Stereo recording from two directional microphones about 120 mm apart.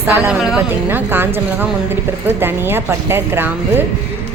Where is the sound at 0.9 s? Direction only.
15° right (ahead or behind).